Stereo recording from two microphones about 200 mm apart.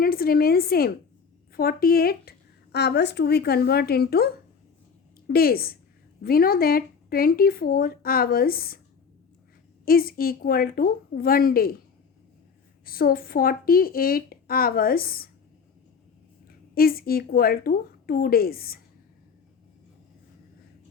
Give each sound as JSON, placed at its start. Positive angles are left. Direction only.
{"t": 0.0, "sound": "speech", "side_deg": 50}
{"t": 5.3, "sound": "speech", "side_deg": 50}
{"t": 9.8, "sound": "speech", "side_deg": 50}
{"t": 12.8, "sound": "speech", "side_deg": 45}
{"t": 16.7, "sound": "speech", "side_deg": 50}